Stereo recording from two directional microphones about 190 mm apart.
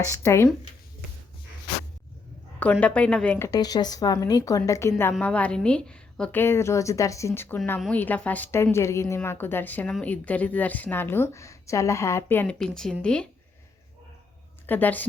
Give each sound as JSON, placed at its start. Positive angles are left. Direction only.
{"t": 0.0, "sound": "a woman's voice", "side_deg": 15}
{"t": 2.8, "sound": "a woman's voice", "side_deg": 5}
{"t": 14.7, "sound": "a woman's voice", "side_deg": 10}